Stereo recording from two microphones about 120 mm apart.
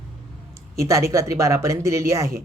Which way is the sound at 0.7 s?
25° right (ahead or behind).